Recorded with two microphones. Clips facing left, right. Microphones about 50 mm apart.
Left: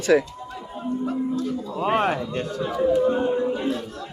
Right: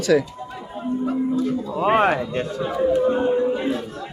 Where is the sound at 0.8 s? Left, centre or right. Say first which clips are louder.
Right 3 dB; centre.